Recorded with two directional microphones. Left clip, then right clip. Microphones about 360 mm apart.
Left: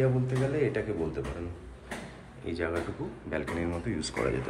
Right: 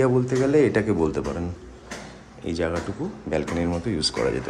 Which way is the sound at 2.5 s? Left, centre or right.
Centre.